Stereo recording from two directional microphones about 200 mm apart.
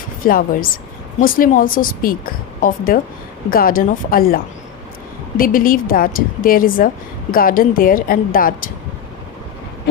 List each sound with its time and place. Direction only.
0.2 s a woman's voice: 45° left (ahead or behind)
5.4 s a woman's voice: 45° left (ahead or behind)